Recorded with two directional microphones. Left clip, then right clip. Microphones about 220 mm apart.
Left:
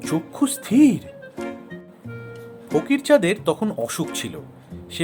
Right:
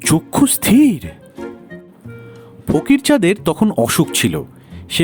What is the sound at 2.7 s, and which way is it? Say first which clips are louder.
Speech: right 3 dB; 40° right (ahead or behind).